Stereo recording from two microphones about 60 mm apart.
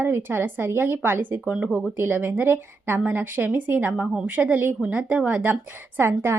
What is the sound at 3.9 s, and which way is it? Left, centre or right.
Speech, centre.